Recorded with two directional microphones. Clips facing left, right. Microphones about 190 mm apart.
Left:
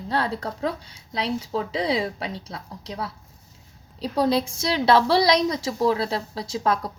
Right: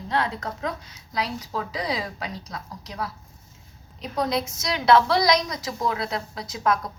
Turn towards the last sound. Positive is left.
turn(degrees=30)  # may be behind; listen again after turning